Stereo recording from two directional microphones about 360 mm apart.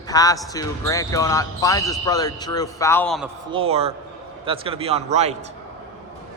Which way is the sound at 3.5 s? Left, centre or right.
Centre.